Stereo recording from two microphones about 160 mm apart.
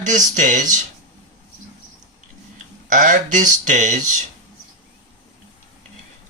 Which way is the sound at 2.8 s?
55° right (ahead or behind).